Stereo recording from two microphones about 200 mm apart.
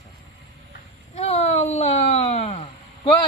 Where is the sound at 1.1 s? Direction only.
30° left (ahead or behind).